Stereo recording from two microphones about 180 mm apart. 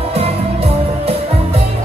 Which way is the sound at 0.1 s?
35° right (ahead or behind).